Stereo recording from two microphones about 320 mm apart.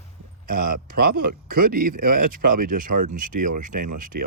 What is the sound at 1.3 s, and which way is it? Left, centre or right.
Speech, right.